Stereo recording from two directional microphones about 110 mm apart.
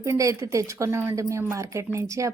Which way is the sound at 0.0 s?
30° right (ahead or behind).